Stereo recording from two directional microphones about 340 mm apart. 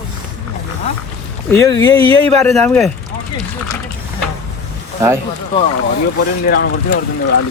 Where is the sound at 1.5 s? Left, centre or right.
Centre.